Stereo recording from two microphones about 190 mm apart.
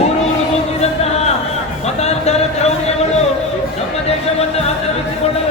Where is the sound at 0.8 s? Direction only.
35° left (ahead or behind).